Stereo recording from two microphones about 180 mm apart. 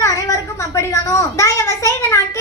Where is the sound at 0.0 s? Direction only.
20° left (ahead or behind).